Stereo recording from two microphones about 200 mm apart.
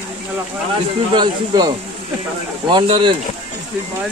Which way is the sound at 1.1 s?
20° right (ahead or behind).